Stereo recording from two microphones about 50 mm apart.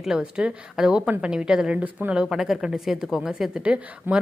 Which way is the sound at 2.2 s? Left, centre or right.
Centre.